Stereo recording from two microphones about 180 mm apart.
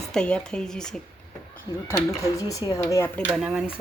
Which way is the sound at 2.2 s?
20° left (ahead or behind).